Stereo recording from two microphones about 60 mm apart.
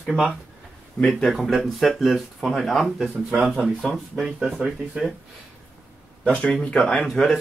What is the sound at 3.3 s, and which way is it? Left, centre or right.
Speech, centre.